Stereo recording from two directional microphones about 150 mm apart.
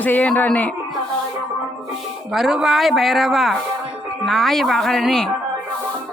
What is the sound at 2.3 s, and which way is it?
Speech, 5° right (ahead or behind).